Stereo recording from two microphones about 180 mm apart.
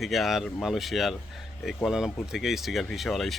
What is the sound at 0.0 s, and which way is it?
Speech, centre (ahead or behind).